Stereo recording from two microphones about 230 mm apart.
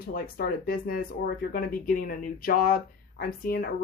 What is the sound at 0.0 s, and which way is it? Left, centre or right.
Speech, left.